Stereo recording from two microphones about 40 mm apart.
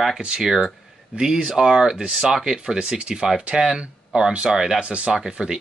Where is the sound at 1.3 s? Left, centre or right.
Centre.